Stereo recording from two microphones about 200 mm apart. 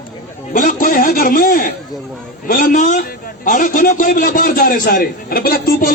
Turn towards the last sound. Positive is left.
turn(degrees=45)  # may be behind; listen again after turning